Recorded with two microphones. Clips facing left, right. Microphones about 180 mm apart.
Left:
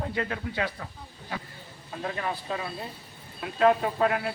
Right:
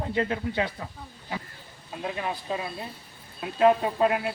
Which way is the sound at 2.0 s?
10° right (ahead or behind).